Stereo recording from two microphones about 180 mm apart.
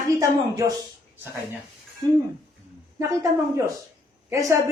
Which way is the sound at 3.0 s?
15° right (ahead or behind).